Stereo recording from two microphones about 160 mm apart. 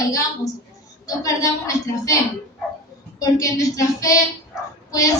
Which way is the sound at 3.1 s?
20° left (ahead or behind).